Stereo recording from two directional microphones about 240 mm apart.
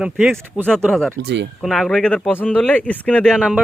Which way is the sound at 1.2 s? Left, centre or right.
Right.